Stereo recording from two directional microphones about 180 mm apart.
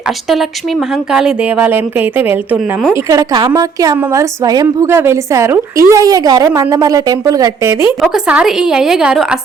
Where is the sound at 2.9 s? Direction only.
20° right (ahead or behind).